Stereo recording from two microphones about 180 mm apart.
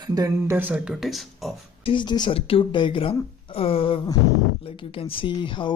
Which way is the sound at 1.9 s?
25° left (ahead or behind).